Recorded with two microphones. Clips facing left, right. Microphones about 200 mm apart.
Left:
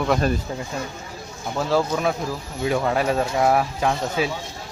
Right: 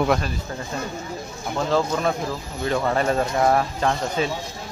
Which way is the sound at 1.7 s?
5° left (ahead or behind).